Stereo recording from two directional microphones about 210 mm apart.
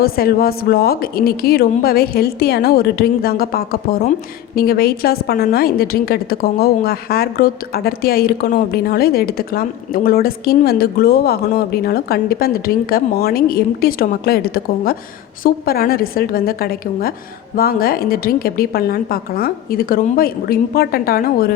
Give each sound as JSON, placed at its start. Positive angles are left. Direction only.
{"t": 0.0, "sound": "a woman's voice", "side_deg": 45}